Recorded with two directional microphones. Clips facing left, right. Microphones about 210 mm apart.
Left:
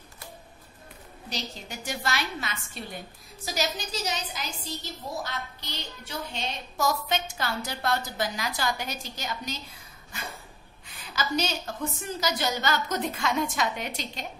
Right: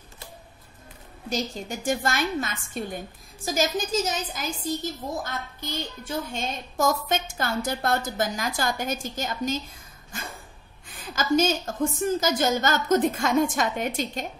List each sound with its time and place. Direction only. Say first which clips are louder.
1.3 s a woman's voice: right 8 dB; 50° right (ahead or behind)
10.9 s a woman's voice: right 7 dB; 50° right (ahead or behind)